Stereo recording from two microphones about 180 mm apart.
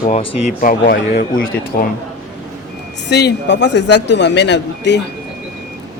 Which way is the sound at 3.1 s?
65° left (ahead or behind).